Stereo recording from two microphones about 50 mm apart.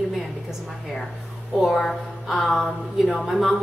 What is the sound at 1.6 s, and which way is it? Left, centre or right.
A woman's voice, centre.